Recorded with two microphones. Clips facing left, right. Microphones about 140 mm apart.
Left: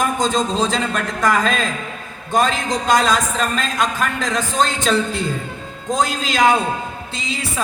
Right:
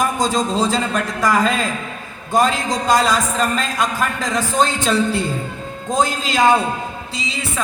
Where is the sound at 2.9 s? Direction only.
5° right (ahead or behind).